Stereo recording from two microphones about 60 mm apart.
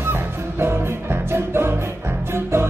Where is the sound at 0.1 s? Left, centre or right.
Right.